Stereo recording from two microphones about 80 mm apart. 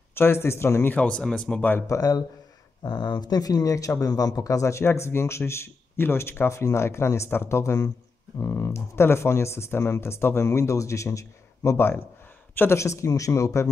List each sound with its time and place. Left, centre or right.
0.1 s speech: left
0.9 s speech: centre
1.8 s speech: left
2.8 s speech: left